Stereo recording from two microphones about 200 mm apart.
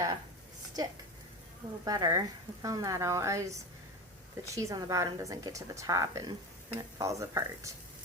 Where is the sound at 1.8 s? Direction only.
20° right (ahead or behind).